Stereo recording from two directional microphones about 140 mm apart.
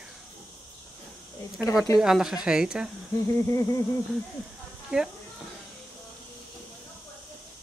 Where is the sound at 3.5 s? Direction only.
20° left (ahead or behind).